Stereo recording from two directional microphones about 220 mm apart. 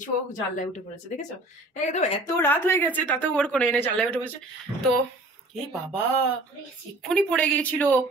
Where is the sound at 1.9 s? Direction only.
30° left (ahead or behind).